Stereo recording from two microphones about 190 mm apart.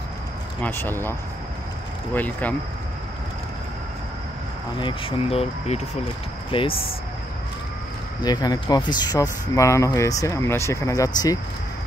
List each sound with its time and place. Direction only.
0.6 s speech: 10° left (ahead or behind)
2.1 s speech: 10° left (ahead or behind)
4.7 s speech: 25° left (ahead or behind)
8.2 s speech: 20° left (ahead or behind)